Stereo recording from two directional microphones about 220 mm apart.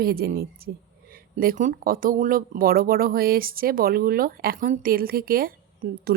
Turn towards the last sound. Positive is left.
turn(degrees=-40)  # may be behind; listen again after turning